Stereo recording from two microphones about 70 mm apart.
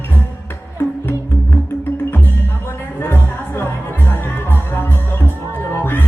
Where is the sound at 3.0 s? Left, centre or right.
Left.